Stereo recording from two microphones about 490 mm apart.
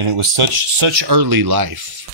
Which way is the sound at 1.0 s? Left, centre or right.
Right.